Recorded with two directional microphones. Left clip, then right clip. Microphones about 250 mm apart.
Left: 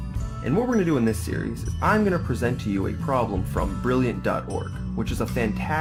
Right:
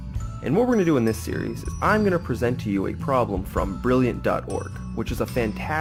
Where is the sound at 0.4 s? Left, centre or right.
Right.